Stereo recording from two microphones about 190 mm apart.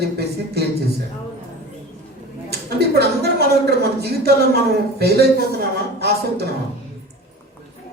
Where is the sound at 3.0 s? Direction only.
55° right (ahead or behind).